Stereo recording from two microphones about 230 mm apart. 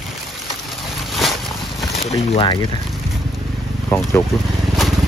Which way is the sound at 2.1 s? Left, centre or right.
Left.